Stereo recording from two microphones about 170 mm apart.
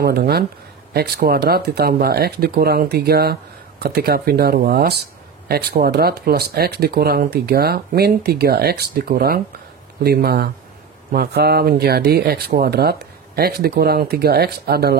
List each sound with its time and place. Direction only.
0.0 s speech: 65° right (ahead or behind)